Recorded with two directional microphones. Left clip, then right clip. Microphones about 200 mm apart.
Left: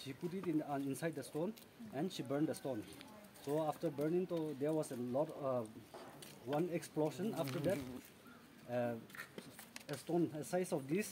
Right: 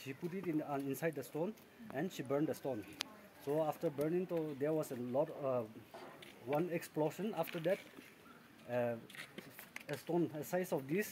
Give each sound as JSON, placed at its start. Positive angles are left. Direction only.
{"t": 0.0, "sound": "speech", "side_deg": -15}
{"t": 6.7, "sound": "speech", "side_deg": -15}
{"t": 8.6, "sound": "speech", "side_deg": -15}